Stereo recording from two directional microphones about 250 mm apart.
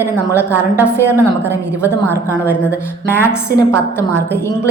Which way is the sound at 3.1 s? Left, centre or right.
Centre.